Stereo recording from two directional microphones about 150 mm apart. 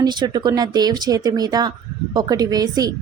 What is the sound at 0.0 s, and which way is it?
A woman's voice, 30° right (ahead or behind).